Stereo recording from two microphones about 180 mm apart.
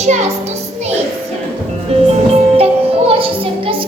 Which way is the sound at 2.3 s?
35° right (ahead or behind).